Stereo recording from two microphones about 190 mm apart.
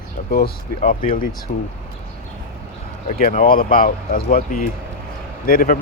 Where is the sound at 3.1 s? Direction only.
50° left (ahead or behind).